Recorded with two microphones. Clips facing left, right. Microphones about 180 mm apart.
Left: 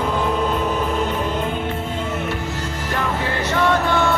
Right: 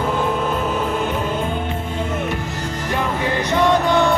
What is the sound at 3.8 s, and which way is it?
Music, 15° right (ahead or behind).